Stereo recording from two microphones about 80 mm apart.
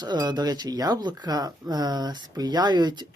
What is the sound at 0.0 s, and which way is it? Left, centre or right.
Speech, right.